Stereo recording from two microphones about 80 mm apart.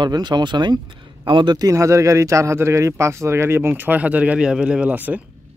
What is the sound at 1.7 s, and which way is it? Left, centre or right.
Speech, right.